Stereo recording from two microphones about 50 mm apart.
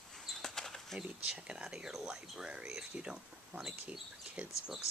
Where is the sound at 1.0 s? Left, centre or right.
Centre.